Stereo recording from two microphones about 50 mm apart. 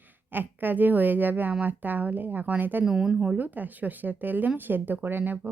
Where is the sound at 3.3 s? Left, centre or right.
Right.